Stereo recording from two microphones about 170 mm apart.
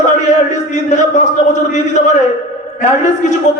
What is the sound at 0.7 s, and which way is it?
Speech, 45° left (ahead or behind).